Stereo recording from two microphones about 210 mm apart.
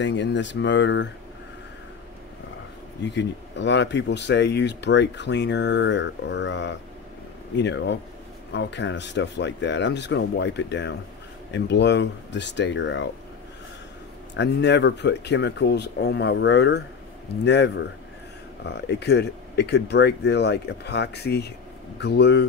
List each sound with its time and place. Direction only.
0.0 s speech: 60° left (ahead or behind)
3.0 s speech: 55° left (ahead or behind)
14.3 s speech: 55° left (ahead or behind)